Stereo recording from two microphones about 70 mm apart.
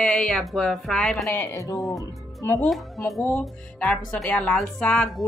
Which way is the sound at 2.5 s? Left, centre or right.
Centre.